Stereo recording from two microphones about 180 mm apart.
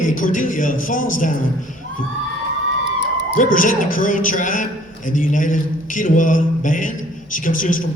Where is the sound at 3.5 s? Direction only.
45° left (ahead or behind).